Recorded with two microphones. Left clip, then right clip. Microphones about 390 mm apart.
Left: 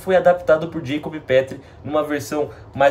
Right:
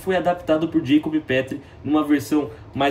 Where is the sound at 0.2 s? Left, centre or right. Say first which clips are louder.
Left 5 dB; centre.